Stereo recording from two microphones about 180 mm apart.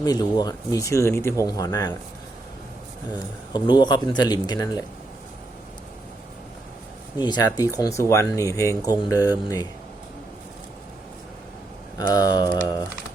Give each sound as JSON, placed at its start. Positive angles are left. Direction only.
{"t": 0.0, "sound": "speech", "side_deg": 20}
{"t": 3.5, "sound": "speech", "side_deg": 25}
{"t": 7.2, "sound": "speech", "side_deg": 25}
{"t": 11.9, "sound": "speech", "side_deg": 20}